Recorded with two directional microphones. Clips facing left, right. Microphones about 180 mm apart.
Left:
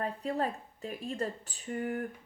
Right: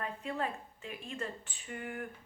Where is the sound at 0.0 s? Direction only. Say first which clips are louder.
Left 4 dB; 35° left (ahead or behind).